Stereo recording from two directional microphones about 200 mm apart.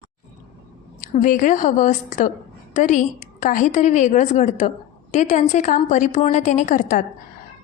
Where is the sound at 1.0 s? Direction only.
40° left (ahead or behind).